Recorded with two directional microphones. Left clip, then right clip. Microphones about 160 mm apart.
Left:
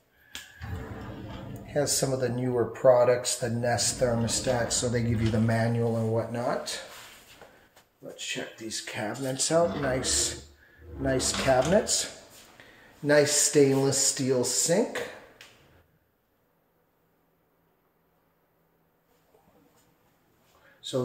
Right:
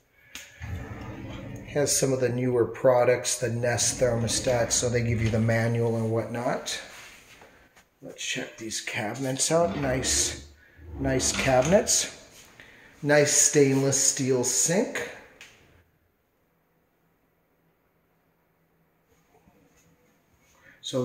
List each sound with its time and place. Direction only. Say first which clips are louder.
1.7 s speech: right 2 dB; 15° right (ahead or behind)
8.2 s speech: right 3 dB; 5° right (ahead or behind)
12.5 s speech: right 2 dB; 5° right (ahead or behind)